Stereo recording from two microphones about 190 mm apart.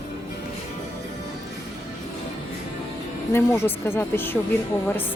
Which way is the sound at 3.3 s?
10° left (ahead or behind).